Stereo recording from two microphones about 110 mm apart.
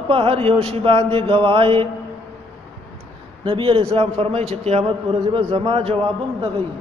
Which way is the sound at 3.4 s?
55° right (ahead or behind).